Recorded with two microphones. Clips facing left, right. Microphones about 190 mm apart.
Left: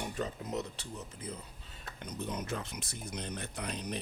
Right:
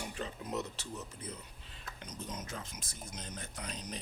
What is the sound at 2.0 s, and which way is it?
Speech, 60° left (ahead or behind).